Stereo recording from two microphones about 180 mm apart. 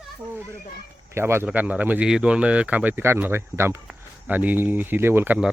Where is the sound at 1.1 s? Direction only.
15° right (ahead or behind).